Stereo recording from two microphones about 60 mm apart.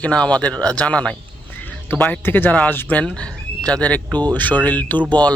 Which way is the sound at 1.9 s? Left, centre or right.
Left.